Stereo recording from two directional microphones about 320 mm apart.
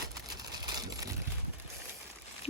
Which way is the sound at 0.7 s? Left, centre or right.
Centre.